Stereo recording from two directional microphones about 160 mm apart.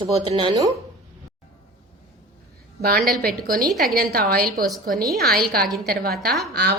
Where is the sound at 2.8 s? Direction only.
70° right (ahead or behind).